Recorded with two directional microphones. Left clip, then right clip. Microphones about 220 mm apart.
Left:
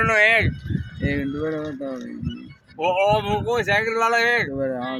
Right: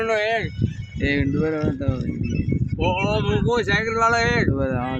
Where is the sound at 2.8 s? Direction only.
55° left (ahead or behind).